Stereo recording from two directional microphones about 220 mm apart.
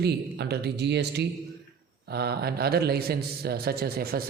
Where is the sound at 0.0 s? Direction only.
45° right (ahead or behind).